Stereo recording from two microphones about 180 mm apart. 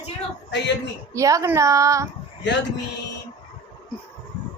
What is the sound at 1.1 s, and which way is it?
Speech, 15° right (ahead or behind).